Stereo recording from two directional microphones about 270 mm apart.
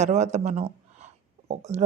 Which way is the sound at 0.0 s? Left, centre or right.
Right.